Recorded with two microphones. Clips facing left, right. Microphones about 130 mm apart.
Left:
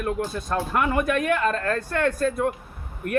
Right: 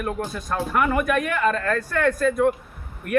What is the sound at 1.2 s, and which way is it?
Speech, 35° left (ahead or behind).